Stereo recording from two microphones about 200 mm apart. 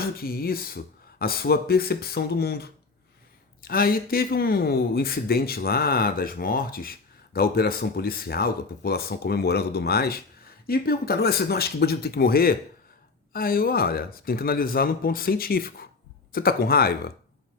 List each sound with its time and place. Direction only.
0.0 s speech: 50° left (ahead or behind)